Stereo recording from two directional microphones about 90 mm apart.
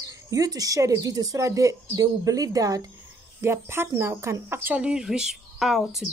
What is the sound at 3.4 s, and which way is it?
Speech, 30° right (ahead or behind).